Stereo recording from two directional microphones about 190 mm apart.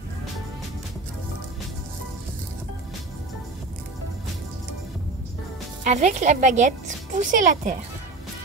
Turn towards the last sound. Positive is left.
turn(degrees=-40)  # may be behind; listen again after turning